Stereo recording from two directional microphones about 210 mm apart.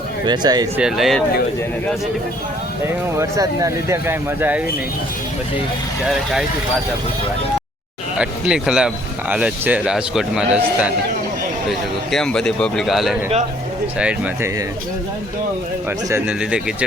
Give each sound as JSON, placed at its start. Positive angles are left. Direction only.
{"t": 0.3, "sound": "speech", "side_deg": -20}
{"t": 0.8, "sound": "a man's voice", "side_deg": 0}
{"t": 3.2, "sound": "speech", "side_deg": -15}
{"t": 8.2, "sound": "a man's voice", "side_deg": -5}
{"t": 12.1, "sound": "a man's voice", "side_deg": 5}
{"t": 16.0, "sound": "a man's voice", "side_deg": -10}